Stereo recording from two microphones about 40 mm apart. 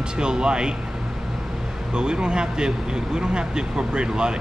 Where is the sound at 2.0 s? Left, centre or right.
Right.